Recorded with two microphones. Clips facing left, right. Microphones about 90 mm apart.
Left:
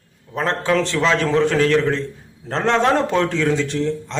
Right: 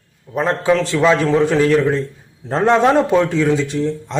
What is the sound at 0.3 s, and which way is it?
A man's voice, 10° right (ahead or behind).